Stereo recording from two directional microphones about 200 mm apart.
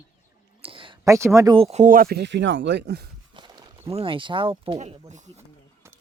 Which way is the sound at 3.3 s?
25° right (ahead or behind).